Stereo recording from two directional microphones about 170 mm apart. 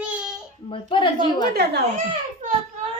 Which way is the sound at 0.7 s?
30° left (ahead or behind).